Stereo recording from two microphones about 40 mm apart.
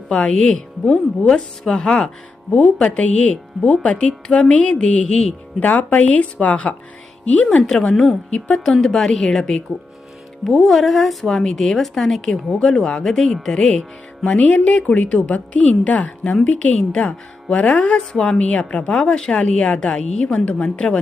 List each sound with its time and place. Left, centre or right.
0.1 s a woman's voice: left
2.5 s a woman's voice: left
5.0 s a woman's voice: centre
5.5 s a woman's voice: left
7.5 s speech: left
8.6 s a woman's voice: centre
10.4 s a woman's voice: centre
12.3 s a woman's voice: centre
12.6 s a woman's voice: centre
14.3 s a woman's voice: left
17.9 s a woman's voice: left
19.0 s speech: centre